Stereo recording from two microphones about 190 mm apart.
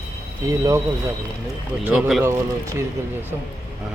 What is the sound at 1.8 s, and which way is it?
Speech, 5° right (ahead or behind).